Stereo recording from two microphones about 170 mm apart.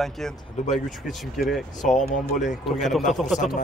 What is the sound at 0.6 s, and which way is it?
Speech, 40° left (ahead or behind).